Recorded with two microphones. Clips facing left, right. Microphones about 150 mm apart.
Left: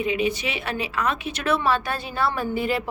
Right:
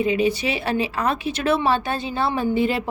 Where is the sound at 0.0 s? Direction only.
35° right (ahead or behind).